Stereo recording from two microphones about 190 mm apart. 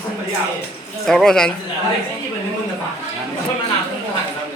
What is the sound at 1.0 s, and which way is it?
Speech, centre (ahead or behind).